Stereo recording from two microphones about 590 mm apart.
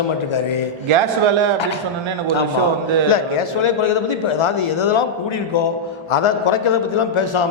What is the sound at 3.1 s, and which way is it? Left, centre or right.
A man's voice, left.